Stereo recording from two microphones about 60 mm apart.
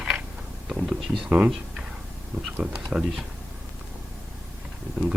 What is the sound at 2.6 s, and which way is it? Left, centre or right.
Speech, right.